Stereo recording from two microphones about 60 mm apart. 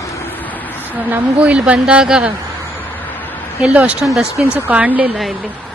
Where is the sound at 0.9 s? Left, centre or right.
Right.